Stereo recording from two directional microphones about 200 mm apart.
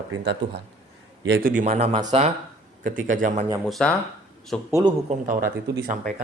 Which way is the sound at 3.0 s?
40° right (ahead or behind).